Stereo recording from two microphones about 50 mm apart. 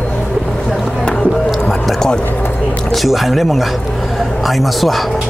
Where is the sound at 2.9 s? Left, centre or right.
Centre.